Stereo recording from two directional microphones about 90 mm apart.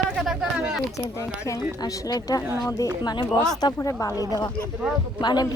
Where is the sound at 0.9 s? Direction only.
35° left (ahead or behind); by 3.2 s 50° left (ahead or behind).